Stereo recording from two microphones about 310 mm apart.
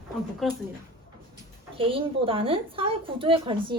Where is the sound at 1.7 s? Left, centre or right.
Centre.